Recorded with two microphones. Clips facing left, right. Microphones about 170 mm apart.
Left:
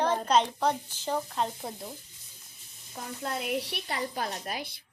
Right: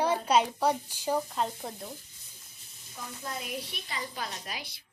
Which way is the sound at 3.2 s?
65° left (ahead or behind).